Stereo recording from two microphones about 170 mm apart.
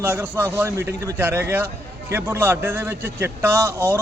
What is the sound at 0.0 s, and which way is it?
A man's voice, 10° right (ahead or behind).